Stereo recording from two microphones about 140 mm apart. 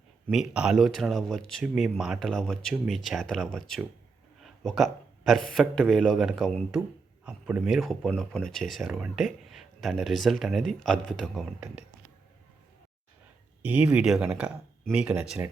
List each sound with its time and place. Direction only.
0.3 s speech: 5° right (ahead or behind)
7.3 s speech: 10° right (ahead or behind)
11.6 s speech: 10° right (ahead or behind)
13.6 s speech: 10° right (ahead or behind)